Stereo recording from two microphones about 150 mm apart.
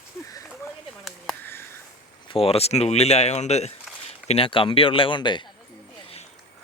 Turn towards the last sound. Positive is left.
turn(degrees=30)  # may be behind; listen again after turning